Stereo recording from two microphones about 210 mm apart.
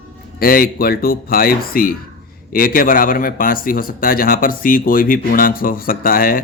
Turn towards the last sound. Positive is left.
turn(degrees=45)  # may be behind; listen again after turning